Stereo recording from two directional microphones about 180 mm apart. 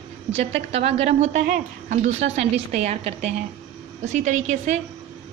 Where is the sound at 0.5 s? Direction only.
35° right (ahead or behind).